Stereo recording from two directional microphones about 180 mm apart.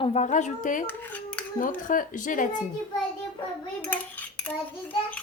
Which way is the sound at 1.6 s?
50° left (ahead or behind).